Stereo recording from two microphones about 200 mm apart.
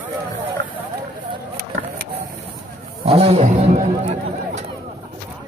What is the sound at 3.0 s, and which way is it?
A man's voice, 30° right (ahead or behind).